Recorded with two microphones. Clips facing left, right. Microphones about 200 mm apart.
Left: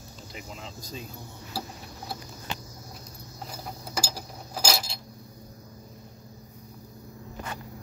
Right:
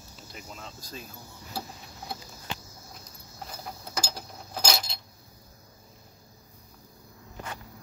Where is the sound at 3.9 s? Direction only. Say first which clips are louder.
Left 2 dB; 5° left (ahead or behind).